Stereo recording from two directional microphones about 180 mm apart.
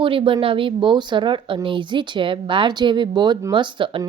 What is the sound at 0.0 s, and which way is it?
Speech, 30° right (ahead or behind).